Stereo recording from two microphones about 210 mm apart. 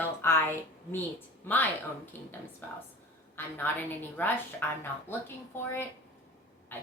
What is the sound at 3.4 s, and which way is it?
A woman's voice, 10° left (ahead or behind).